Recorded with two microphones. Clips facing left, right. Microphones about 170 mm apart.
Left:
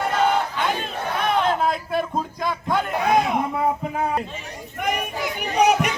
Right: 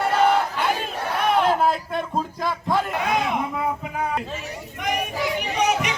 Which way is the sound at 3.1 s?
45° left (ahead or behind).